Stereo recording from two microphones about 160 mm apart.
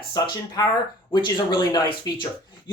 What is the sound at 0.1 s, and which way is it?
Speech, 25° left (ahead or behind).